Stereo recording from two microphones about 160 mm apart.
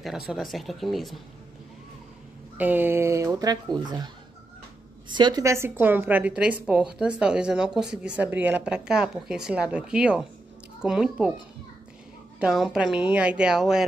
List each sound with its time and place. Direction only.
0.3 s a woman's voice: centre (ahead or behind)
2.5 s speech: 10° right (ahead or behind); by 4.1 s 25° right (ahead or behind)
5.1 s a woman's voice: 25° right (ahead or behind); by 11.3 s 5° right (ahead or behind)
12.4 s a woman's voice: centre (ahead or behind)